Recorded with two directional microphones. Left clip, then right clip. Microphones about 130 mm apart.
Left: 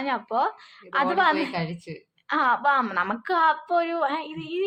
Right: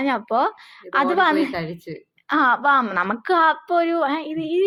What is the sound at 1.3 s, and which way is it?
Speech, 15° right (ahead or behind).